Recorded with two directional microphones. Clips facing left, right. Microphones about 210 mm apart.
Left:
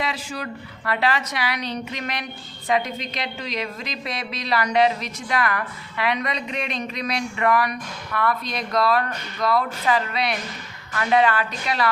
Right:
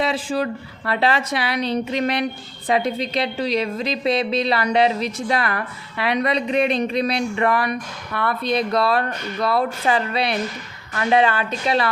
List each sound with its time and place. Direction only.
0.0 s a woman's voice: 30° right (ahead or behind)